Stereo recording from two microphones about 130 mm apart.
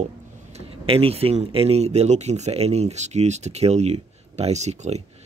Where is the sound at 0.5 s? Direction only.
45° right (ahead or behind).